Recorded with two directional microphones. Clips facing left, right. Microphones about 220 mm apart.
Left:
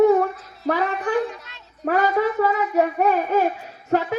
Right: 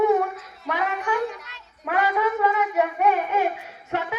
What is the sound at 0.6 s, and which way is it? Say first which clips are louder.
A woman's voice: left 4 dB; 40° left (ahead or behind).